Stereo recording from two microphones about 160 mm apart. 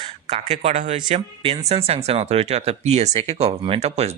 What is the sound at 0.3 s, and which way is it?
Speech, 45° right (ahead or behind).